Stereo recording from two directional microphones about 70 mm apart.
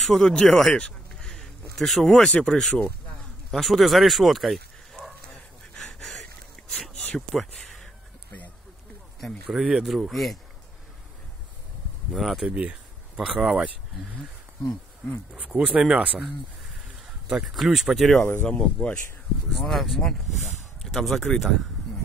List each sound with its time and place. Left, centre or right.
0.0 s speech: centre
0.7 s a sound: centre
2.4 s speech: centre
5.9 s a sound: centre
7.2 s speech: centre
9.5 s speech: centre
12.1 s speech: centre
12.4 s speech: centre
15.3 s speech: centre
16.8 s a sound: centre
17.5 s speech: centre
18.4 s speech: centre
19.6 s speech: centre